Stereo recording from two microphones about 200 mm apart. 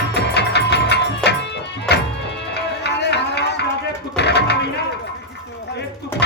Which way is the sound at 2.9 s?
55° left (ahead or behind).